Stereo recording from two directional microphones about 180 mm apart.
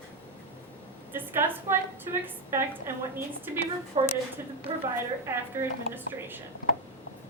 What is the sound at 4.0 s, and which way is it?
Speech, 30° right (ahead or behind).